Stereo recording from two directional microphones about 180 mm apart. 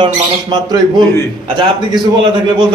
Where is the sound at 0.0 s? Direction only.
25° right (ahead or behind).